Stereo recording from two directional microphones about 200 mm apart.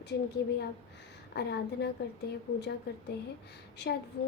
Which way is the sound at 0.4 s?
55° left (ahead or behind).